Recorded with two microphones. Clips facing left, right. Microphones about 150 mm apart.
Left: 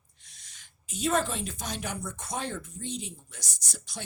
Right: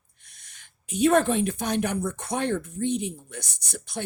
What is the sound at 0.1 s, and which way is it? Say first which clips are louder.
Speech: right 2 dB; 55° right (ahead or behind).